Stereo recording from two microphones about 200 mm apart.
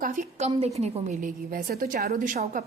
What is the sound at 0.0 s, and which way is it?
A woman's voice, 40° right (ahead or behind).